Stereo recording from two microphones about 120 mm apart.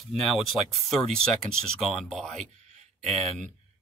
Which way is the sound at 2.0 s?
5° left (ahead or behind).